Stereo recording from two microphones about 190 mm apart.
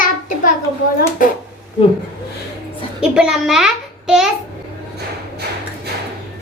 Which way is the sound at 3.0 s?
5° right (ahead or behind).